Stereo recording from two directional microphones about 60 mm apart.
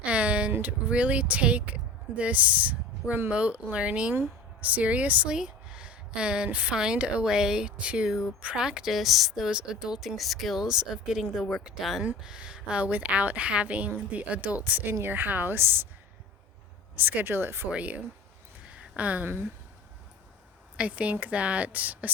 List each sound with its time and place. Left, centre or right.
0.0 s a sound: right
0.5 s a woman's voice: right
10.2 s a woman's voice: centre; by 14.9 s right
14.9 s a woman's voice: right
16.9 s a woman's voice: right
17.7 s a woman's voice: right
18.7 s a sound: right
20.7 s a woman's voice: right